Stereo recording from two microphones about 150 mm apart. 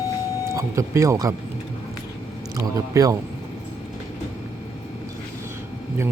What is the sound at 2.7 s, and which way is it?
Speech, 25° right (ahead or behind).